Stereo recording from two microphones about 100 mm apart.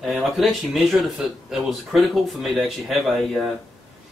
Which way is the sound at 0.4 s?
Centre (ahead or behind).